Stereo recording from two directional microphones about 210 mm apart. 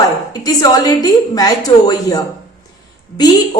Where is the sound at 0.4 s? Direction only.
15° left (ahead or behind).